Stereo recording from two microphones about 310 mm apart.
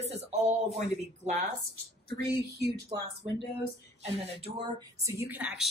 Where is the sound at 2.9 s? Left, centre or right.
Centre.